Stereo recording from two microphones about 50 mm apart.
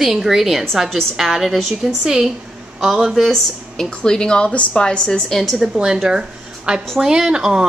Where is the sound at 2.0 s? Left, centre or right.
Centre.